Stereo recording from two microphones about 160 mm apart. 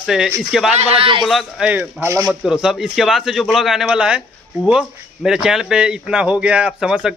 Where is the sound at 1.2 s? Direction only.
5° right (ahead or behind).